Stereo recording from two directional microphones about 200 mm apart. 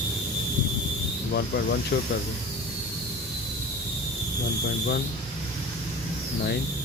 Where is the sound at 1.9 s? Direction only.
50° left (ahead or behind).